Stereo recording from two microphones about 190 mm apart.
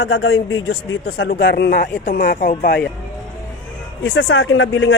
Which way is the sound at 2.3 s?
40° left (ahead or behind).